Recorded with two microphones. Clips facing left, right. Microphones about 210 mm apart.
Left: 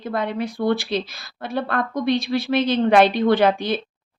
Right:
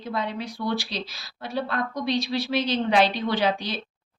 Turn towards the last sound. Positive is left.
turn(degrees=55)  # may be behind; listen again after turning